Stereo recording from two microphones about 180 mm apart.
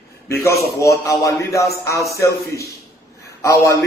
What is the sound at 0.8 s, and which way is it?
A man's voice, 15° left (ahead or behind).